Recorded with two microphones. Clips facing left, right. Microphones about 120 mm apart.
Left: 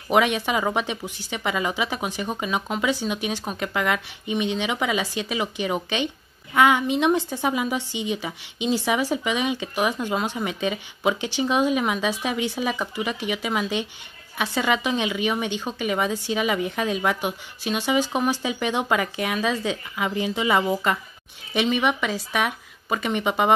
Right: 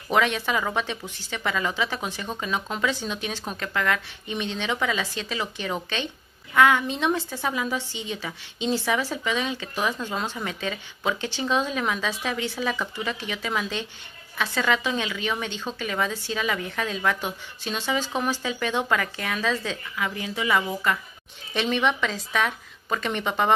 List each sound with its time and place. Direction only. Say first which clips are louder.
0.1 s a woman's voice: left 3 dB; 15° left (ahead or behind)
21.5 s a woman's voice: left 2 dB; 10° left (ahead or behind)